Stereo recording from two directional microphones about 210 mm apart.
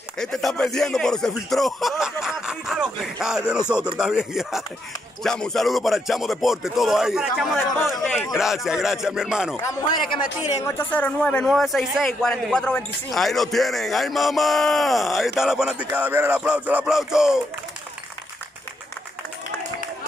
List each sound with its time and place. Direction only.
0.2 s a man's voice: centre (ahead or behind)
9.6 s a man's voice: 15° left (ahead or behind); by 17.4 s 5° right (ahead or behind)